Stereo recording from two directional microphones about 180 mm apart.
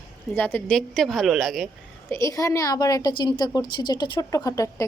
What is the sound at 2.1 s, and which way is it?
A woman's voice, 15° left (ahead or behind).